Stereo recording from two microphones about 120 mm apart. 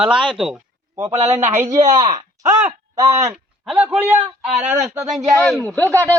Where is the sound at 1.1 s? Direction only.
65° right (ahead or behind).